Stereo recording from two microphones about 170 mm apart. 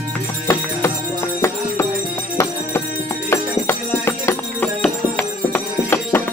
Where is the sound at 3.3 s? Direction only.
15° left (ahead or behind).